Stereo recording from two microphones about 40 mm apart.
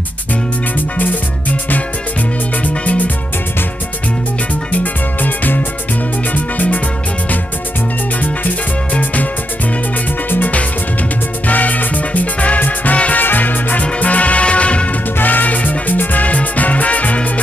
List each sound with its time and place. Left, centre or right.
2.6 s music: left
4.7 s music: left
8.2 s music: left
11.4 s music: left
13.2 s music: left
15.1 s music: left